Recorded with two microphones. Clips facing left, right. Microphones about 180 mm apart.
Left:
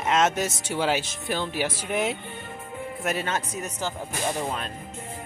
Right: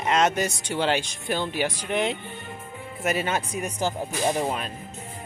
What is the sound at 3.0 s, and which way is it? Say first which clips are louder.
Speech: right 3 dB; 5° right (ahead or behind).